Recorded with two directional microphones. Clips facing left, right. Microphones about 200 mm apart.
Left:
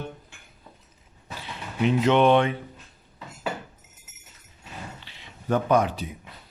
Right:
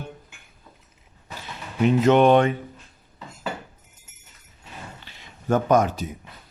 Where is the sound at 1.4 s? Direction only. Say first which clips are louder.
Right 3 dB; 45° right (ahead or behind).